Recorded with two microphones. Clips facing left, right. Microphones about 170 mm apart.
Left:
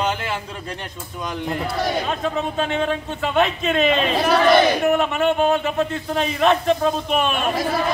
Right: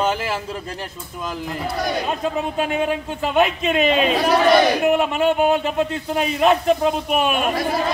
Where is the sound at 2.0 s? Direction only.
10° right (ahead or behind).